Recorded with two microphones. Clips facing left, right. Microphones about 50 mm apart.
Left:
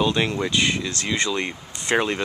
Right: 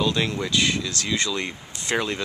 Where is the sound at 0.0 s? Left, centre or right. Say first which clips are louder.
Left 2 dB; left.